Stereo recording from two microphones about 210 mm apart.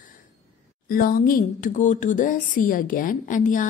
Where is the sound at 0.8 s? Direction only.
45° left (ahead or behind).